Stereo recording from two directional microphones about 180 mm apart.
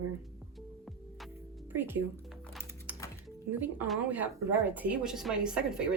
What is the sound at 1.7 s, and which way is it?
Speech, 10° right (ahead or behind).